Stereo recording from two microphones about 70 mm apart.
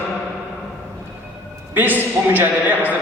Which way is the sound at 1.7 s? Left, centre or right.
Right.